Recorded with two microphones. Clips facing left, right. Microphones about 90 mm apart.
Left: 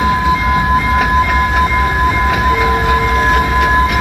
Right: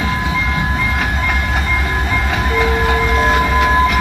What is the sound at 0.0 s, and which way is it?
Train, 15° left (ahead or behind).